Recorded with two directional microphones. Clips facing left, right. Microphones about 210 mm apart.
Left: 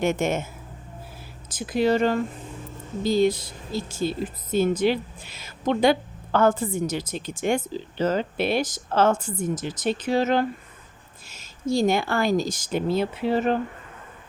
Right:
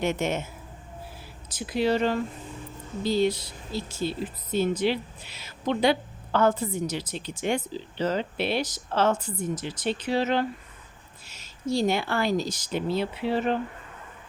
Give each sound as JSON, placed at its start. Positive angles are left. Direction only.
{"t": 0.0, "sound": "a woman's voice", "side_deg": 50}
{"t": 1.5, "sound": "a woman's voice", "side_deg": 50}